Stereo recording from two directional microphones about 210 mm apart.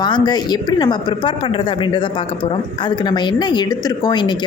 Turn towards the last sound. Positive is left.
turn(degrees=20)  # may be behind; listen again after turning